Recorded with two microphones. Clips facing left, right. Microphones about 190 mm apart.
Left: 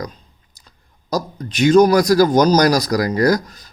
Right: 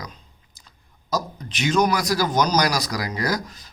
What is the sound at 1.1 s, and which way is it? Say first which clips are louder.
A man's voice: left 6 dB; 40° left (ahead or behind).